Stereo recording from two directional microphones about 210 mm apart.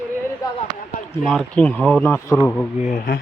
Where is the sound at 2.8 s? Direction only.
40° left (ahead or behind).